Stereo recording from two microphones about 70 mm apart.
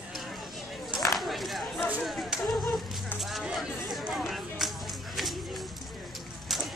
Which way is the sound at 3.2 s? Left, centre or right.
Centre.